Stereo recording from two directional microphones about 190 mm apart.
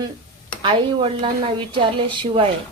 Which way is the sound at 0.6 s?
25° right (ahead or behind).